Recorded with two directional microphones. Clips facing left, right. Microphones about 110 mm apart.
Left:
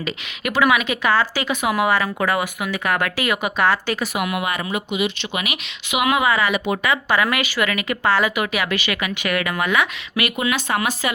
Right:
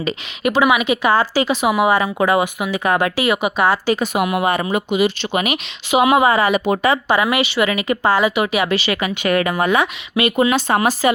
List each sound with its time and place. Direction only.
0.0 s speech: 30° right (ahead or behind)
1.3 s speech: 30° right (ahead or behind)